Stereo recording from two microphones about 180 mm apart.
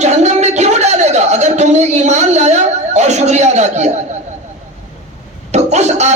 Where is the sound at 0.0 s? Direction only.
40° right (ahead or behind).